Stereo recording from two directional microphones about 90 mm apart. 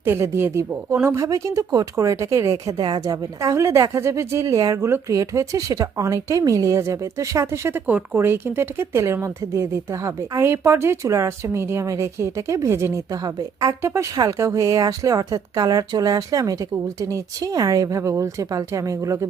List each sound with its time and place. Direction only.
0.0 s a woman's voice: 25° right (ahead or behind)
2.7 s speech: 55° right (ahead or behind)
3.0 s a woman's voice: 40° right (ahead or behind)
13.2 s a woman's voice: 45° right (ahead or behind)
13.8 s a woman's voice: 35° right (ahead or behind)